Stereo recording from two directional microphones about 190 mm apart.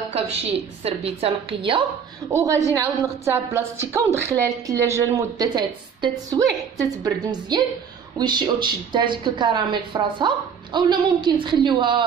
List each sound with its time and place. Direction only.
0.8 s a woman's voice: 30° right (ahead or behind)
2.3 s a woman's voice: 15° right (ahead or behind)